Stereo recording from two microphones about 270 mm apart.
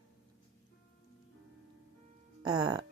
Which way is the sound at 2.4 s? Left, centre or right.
Centre.